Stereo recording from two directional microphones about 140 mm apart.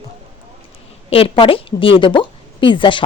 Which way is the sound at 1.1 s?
45° left (ahead or behind).